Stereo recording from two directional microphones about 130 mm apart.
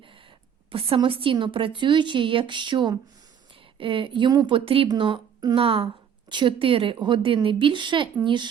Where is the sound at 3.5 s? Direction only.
40° right (ahead or behind).